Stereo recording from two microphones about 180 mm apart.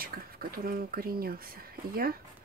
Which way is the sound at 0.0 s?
55° right (ahead or behind).